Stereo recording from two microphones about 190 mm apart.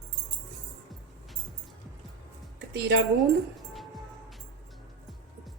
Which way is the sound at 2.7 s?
65° right (ahead or behind).